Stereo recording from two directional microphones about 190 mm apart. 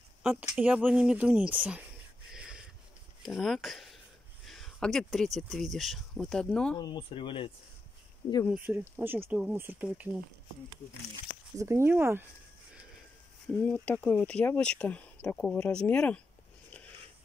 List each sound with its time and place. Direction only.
0.2 s speech: 5° right (ahead or behind)
2.3 s a sound: 5° right (ahead or behind)
3.2 s speech: centre (ahead or behind)
6.8 s speech: 25° left (ahead or behind)
8.5 s speech: 10° right (ahead or behind)
11.5 s speech: 15° right (ahead or behind)
13.5 s speech: 5° left (ahead or behind)